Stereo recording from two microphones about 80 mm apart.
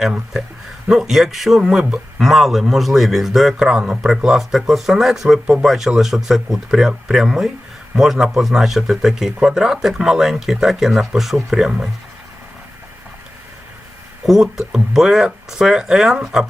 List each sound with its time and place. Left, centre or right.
0.0 s a man's voice: centre
14.3 s speech: centre